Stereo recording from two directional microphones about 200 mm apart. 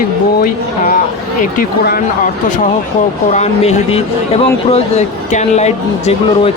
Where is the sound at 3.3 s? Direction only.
35° left (ahead or behind).